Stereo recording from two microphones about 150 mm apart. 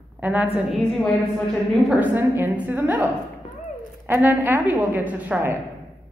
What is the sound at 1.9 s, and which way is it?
A woman's voice, 10° right (ahead or behind).